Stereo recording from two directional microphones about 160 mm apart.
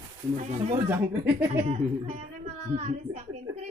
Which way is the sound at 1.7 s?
40° right (ahead or behind).